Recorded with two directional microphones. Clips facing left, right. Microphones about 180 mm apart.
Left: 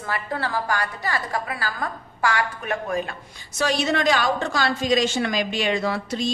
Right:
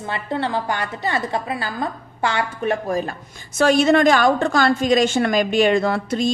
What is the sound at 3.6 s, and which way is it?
A woman's voice, 50° right (ahead or behind).